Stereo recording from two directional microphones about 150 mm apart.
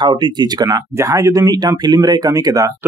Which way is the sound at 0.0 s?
30° right (ahead or behind).